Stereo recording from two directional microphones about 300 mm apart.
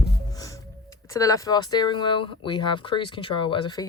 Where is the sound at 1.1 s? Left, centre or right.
Centre.